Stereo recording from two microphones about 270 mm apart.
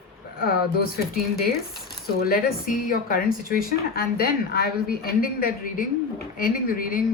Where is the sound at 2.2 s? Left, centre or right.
Left.